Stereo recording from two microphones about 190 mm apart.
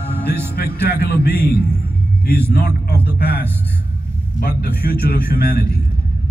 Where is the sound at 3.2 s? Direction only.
55° left (ahead or behind).